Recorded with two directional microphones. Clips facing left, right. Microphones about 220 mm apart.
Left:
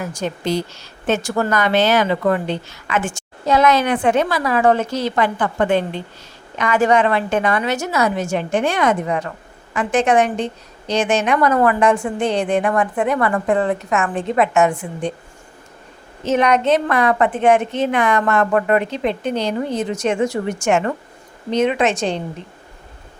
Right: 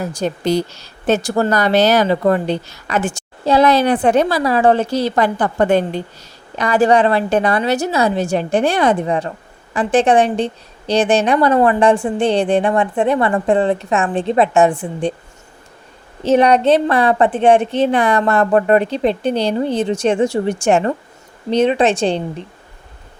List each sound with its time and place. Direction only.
0.0 s speech: 35° right (ahead or behind)
16.2 s speech: 35° right (ahead or behind)